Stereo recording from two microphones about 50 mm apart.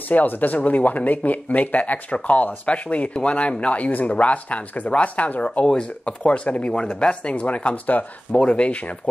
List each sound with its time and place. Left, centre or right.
0.1 s speech: left
5.7 s speech: centre